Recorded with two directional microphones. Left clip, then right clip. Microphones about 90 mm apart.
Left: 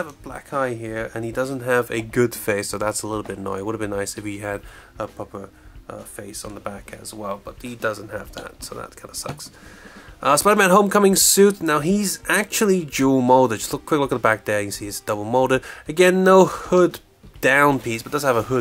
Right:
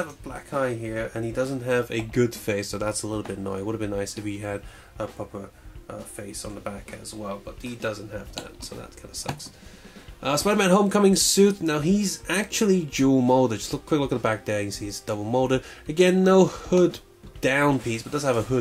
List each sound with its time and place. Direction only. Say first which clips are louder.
0.0 s speech: left 2 dB; 25° left (ahead or behind)
10.2 s speech: left 7 dB; 35° left (ahead or behind)